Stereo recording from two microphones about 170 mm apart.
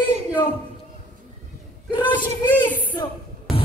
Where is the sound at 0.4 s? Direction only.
30° left (ahead or behind).